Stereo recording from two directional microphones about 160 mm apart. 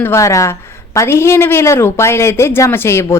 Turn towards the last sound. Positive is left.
turn(degrees=15)  # may be behind; listen again after turning